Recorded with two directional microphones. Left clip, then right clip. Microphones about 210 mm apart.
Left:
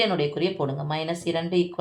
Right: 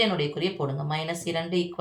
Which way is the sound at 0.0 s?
40° left (ahead or behind).